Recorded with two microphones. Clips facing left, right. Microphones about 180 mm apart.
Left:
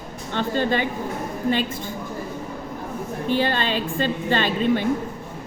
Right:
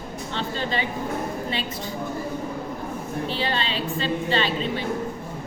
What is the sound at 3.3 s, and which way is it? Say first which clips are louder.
A woman's voice: left 8 dB; 50° left (ahead or behind).